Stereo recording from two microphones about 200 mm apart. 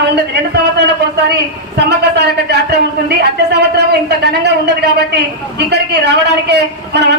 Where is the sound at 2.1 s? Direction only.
55° right (ahead or behind).